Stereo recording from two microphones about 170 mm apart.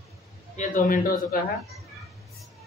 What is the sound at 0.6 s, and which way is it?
Speech, 55° left (ahead or behind).